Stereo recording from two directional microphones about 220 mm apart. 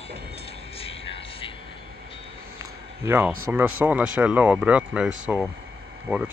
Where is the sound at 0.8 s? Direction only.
25° left (ahead or behind).